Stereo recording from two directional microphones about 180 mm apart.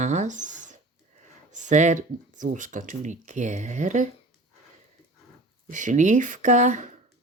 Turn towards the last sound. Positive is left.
turn(degrees=-40)  # may be behind; listen again after turning